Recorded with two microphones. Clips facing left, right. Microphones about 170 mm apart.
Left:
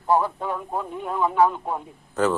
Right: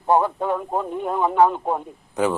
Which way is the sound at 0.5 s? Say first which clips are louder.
Right 5 dB; 30° right (ahead or behind).